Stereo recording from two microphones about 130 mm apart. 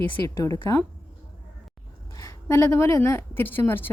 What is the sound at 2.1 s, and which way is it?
A woman's voice, 25° left (ahead or behind).